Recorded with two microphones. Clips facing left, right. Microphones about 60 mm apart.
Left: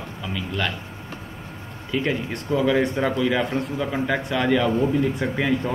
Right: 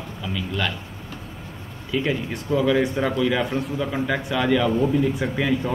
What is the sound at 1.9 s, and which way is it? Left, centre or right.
Speech, centre.